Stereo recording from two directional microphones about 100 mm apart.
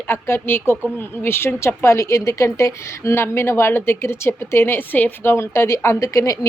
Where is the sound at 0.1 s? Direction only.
25° left (ahead or behind).